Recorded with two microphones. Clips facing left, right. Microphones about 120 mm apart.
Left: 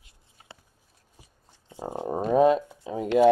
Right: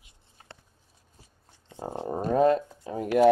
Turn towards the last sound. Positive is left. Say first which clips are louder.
# left 1 dB
turn(degrees=20)  # may be behind; listen again after turning